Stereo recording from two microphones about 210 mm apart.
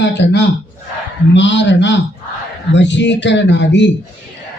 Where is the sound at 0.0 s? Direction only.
55° left (ahead or behind).